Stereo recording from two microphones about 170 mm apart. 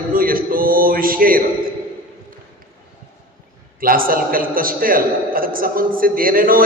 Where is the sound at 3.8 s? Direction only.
55° right (ahead or behind).